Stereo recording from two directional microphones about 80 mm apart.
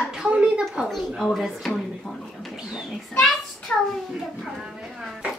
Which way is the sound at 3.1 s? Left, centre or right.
Centre.